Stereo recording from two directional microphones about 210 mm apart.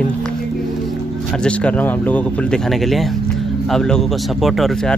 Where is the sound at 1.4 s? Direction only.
5° left (ahead or behind).